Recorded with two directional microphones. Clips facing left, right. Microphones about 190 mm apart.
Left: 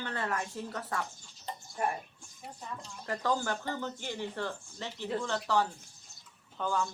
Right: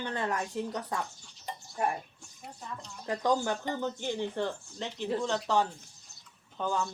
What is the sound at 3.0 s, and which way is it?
Speech, 20° right (ahead or behind).